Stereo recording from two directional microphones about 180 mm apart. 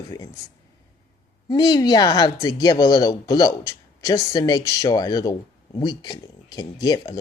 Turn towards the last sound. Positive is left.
turn(degrees=20)  # may be behind; listen again after turning